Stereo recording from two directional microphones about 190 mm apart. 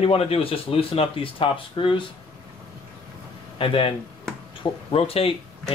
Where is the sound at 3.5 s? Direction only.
30° left (ahead or behind).